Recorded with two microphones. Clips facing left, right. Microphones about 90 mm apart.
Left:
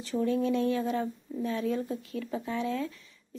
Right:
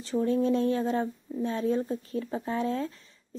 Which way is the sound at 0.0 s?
35° right (ahead or behind).